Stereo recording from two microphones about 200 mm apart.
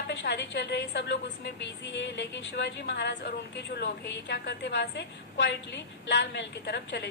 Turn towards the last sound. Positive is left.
turn(degrees=55)  # may be behind; listen again after turning